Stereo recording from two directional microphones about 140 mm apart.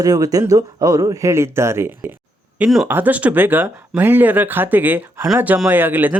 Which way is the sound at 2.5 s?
5° right (ahead or behind).